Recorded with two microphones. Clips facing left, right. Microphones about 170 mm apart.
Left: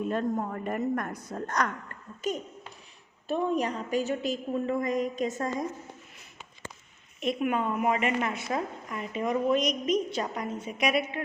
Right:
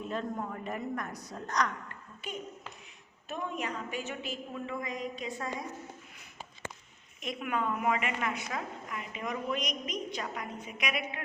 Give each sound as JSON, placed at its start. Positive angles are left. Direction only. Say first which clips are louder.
{"t": 0.1, "sound": "a woman's voice", "louder": "left 6 dB", "side_deg": 50}
{"t": 7.2, "sound": "a woman's voice", "louder": "left 6 dB", "side_deg": 25}